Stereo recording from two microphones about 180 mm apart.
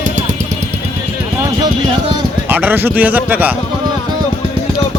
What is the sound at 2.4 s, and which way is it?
Speech, 10° right (ahead or behind).